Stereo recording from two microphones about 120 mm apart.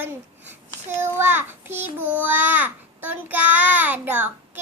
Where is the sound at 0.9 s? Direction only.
20° right (ahead or behind).